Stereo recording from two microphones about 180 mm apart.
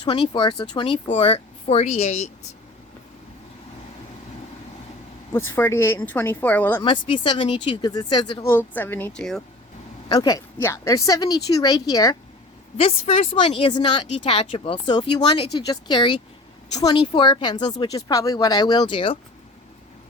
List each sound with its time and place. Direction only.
0.0 s speech: 25° left (ahead or behind)
5.3 s speech: 10° left (ahead or behind)
6.8 s speech: 25° left (ahead or behind)
8.4 s speech: 10° left (ahead or behind)
10.1 s speech: 20° left (ahead or behind)
12.7 s speech: 35° left (ahead or behind)